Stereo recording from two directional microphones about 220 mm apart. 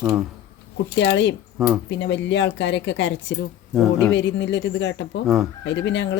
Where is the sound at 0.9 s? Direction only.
55° left (ahead or behind).